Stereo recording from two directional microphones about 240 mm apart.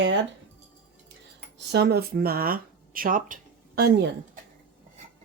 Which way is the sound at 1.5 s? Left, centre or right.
Right.